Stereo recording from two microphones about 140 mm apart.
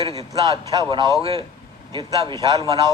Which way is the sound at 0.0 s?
45° right (ahead or behind).